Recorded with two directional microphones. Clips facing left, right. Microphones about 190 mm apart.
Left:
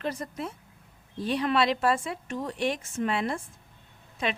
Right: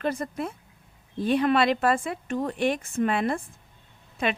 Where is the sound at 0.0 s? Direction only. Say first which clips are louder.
Right 4 dB; 55° right (ahead or behind).